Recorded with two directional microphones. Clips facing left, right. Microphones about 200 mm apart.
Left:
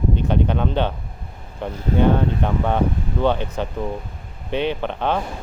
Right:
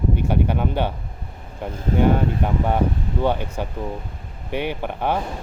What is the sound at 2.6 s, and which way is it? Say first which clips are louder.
Speech: left 1 dB; 10° right (ahead or behind).